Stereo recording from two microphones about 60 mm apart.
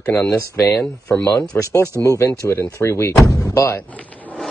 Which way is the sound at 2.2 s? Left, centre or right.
Left.